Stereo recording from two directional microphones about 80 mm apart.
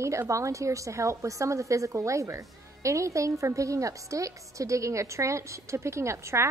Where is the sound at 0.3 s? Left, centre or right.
Right.